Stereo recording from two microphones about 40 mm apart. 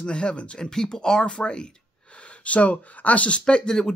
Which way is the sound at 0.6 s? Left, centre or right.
Centre.